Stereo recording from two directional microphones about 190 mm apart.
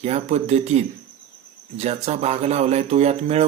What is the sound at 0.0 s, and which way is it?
Speech, 35° right (ahead or behind).